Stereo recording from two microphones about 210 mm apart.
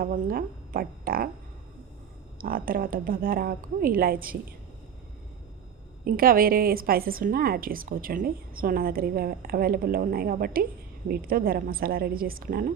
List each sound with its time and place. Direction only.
0.0 s speech: 40° right (ahead or behind)
2.4 s a woman's voice: 45° right (ahead or behind)
6.1 s a woman's voice: 45° right (ahead or behind)